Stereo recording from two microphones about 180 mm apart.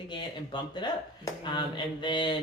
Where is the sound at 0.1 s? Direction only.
25° left (ahead or behind).